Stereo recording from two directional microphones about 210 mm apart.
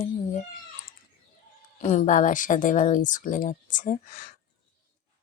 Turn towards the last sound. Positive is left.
turn(degrees=40)  # may be behind; listen again after turning